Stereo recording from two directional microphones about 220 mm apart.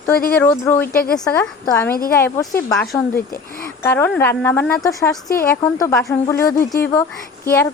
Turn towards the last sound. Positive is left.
turn(degrees=10)  # may be behind; listen again after turning